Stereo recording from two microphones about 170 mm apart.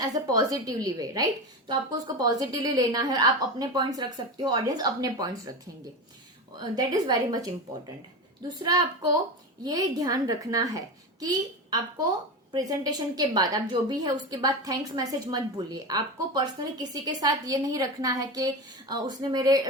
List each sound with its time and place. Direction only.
0.0 s a woman's voice: 20° right (ahead or behind)
6.6 s a woman's voice: 20° right (ahead or behind)
8.6 s a woman's voice: 25° right (ahead or behind)